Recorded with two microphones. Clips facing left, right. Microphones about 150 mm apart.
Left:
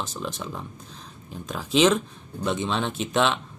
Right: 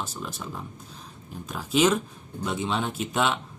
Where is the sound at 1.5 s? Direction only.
5° right (ahead or behind).